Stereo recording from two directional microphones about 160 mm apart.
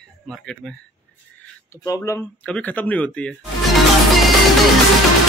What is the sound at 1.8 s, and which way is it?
Speech, 20° left (ahead or behind).